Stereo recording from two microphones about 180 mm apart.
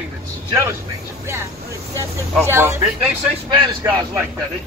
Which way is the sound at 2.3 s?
15° right (ahead or behind).